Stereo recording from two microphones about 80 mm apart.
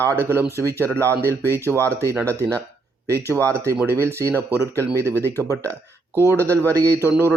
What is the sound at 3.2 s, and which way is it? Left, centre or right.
Speech, left.